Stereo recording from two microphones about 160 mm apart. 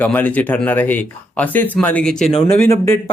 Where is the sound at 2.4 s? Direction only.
20° left (ahead or behind).